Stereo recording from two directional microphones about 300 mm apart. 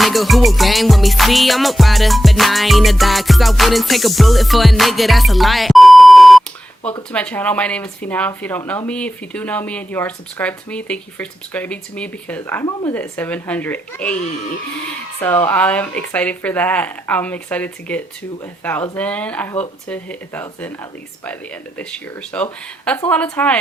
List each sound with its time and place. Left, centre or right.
0.0 s speech: centre
15.2 s speech: centre